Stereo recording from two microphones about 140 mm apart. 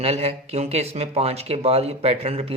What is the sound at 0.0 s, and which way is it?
Speech, 45° right (ahead or behind).